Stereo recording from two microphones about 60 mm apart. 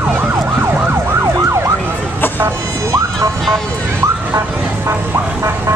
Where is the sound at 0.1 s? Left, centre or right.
Right.